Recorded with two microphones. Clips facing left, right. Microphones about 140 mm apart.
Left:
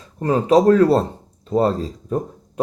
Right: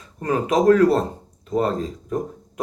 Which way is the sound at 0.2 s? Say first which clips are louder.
Left 5 dB; 30° left (ahead or behind).